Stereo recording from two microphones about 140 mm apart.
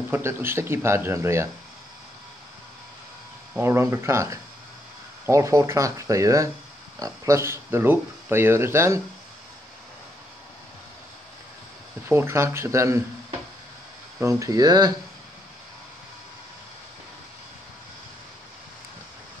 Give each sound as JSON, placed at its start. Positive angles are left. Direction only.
{"t": 0.1, "sound": "speech", "side_deg": -15}
{"t": 3.5, "sound": "speech", "side_deg": -15}
{"t": 12.1, "sound": "speech", "side_deg": -15}
{"t": 14.2, "sound": "speech", "side_deg": -25}